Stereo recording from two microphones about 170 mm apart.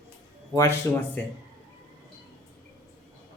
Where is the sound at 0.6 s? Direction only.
15° left (ahead or behind).